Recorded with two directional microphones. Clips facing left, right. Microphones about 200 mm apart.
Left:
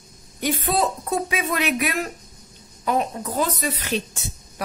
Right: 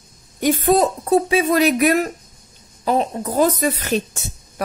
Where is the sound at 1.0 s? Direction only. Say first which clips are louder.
Right 8 dB; 30° right (ahead or behind).